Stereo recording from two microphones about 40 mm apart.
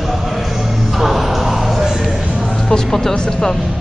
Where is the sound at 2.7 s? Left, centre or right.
Centre.